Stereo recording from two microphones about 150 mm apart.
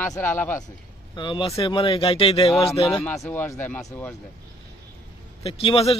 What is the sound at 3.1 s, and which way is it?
Speech, 15° left (ahead or behind).